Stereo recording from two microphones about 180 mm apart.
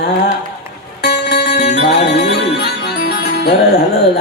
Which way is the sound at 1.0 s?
65° left (ahead or behind).